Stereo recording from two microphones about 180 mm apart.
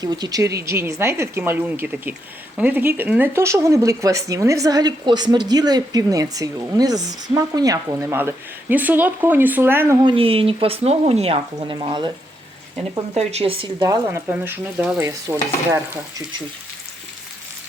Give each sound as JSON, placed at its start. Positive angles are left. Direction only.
{"t": 0.0, "sound": "speech", "side_deg": -20}
{"t": 10.0, "sound": "speech", "side_deg": -30}
{"t": 13.1, "sound": "speech", "side_deg": -35}